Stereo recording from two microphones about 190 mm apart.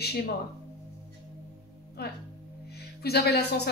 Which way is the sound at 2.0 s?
55° left (ahead or behind).